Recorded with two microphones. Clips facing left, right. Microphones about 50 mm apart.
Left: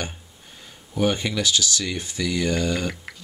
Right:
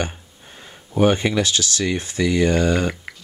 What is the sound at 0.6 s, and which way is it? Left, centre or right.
Speech, right.